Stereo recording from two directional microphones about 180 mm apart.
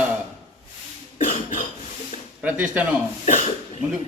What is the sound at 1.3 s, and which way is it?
Cough, 45° left (ahead or behind).